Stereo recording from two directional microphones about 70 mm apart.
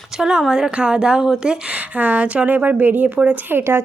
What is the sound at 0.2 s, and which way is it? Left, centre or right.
Speech, centre.